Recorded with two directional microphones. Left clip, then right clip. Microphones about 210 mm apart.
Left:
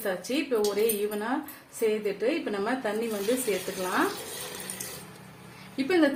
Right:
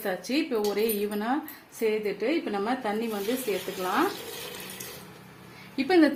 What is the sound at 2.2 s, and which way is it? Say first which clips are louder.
Speech: even; 30° right (ahead or behind).